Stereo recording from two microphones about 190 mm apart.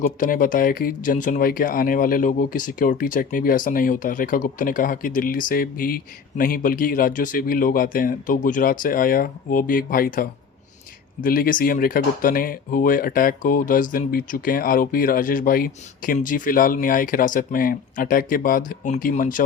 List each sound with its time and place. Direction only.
0.0 s speech: 45° left (ahead or behind)